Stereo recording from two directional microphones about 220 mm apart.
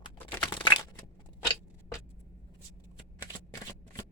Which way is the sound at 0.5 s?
20° left (ahead or behind).